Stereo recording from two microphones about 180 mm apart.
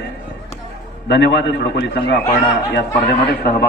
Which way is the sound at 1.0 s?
80° left.